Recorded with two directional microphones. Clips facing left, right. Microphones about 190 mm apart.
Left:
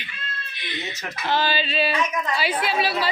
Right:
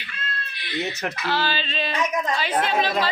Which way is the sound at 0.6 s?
20° left (ahead or behind).